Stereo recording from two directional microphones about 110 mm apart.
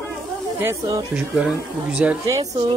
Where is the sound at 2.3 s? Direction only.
30° right (ahead or behind).